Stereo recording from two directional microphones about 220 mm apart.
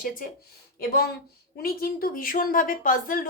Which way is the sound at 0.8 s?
45° left (ahead or behind).